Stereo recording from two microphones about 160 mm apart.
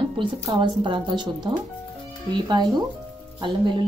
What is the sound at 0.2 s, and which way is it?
Speech, 30° right (ahead or behind).